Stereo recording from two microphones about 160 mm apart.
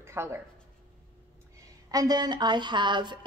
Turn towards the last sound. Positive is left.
turn(degrees=-30)  # may be behind; listen again after turning